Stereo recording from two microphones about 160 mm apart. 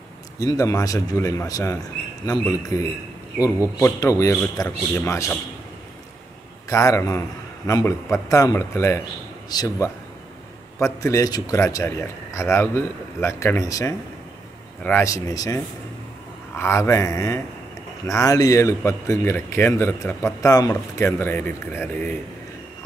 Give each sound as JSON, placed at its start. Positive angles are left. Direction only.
{"t": 0.4, "sound": "a man's voice", "side_deg": 20}
{"t": 6.7, "sound": "a man's voice", "side_deg": 20}